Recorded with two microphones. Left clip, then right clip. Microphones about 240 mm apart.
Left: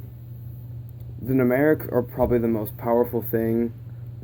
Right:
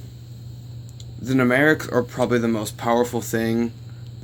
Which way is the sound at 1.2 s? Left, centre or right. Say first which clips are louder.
Right 2 dB; right.